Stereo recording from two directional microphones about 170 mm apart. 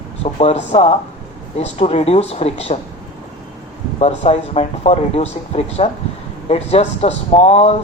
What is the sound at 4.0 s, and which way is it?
A woman's voice, 40° left (ahead or behind).